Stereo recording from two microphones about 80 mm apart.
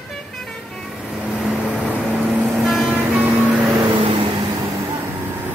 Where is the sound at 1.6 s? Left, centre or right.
Centre.